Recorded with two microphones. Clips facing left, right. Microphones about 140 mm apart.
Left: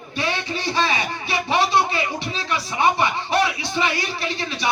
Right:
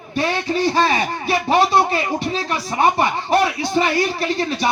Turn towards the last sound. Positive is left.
turn(degrees=-45)  # may be behind; listen again after turning